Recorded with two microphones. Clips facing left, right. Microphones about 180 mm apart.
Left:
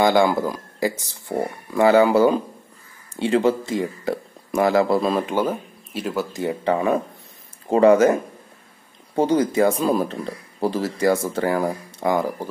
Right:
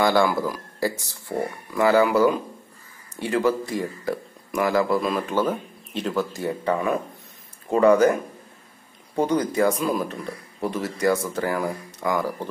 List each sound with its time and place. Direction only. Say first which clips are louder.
0.0 s speech: left 3 dB; 20° left (ahead or behind)
5.2 s speech: left 1 dB; 15° left (ahead or behind)
6.3 s speech: left 3 dB; 20° left (ahead or behind)